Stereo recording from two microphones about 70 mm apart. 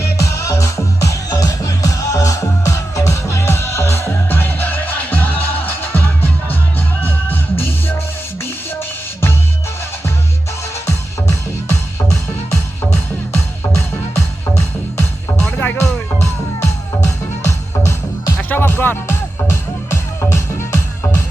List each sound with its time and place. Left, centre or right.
0.0 s music: left
10.8 s music: left
15.4 s music: centre
17.4 s music: left
18.3 s music: left